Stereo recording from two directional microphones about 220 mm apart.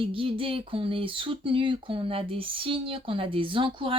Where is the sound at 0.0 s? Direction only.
25° right (ahead or behind).